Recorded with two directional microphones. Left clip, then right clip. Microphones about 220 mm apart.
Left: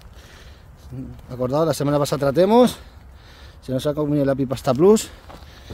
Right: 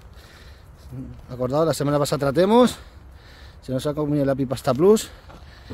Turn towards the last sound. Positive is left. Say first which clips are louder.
# left 2 dB
turn(degrees=10)  # may be behind; listen again after turning